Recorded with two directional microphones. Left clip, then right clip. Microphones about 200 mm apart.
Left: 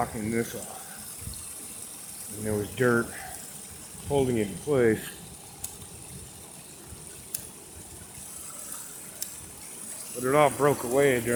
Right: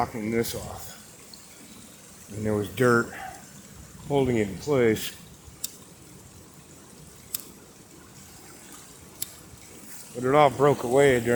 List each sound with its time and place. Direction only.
0.0 s speech: 20° right (ahead or behind)
2.4 s speech: 25° right (ahead or behind)
4.1 s speech: 25° right (ahead or behind)
10.2 s speech: 20° right (ahead or behind)